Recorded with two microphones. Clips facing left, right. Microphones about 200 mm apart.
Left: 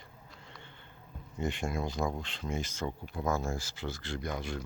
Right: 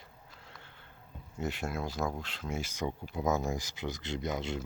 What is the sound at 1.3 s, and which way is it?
Speech, 5° right (ahead or behind).